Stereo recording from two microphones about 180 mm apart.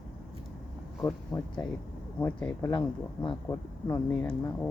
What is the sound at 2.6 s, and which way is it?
Speech, 20° left (ahead or behind).